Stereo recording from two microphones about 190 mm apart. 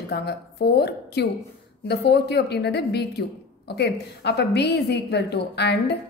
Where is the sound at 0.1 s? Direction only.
60° left (ahead or behind).